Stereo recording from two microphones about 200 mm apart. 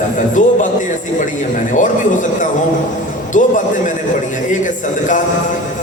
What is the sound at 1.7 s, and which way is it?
Speech, 40° left (ahead or behind).